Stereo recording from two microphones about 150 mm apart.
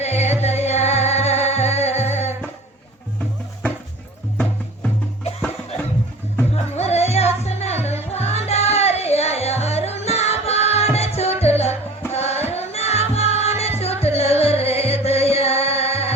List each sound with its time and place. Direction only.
0.0 s music: 45° left (ahead or behind)
6.5 s music: 45° left (ahead or behind)